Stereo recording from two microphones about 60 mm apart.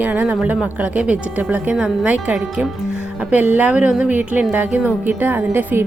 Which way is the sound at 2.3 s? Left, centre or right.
Centre.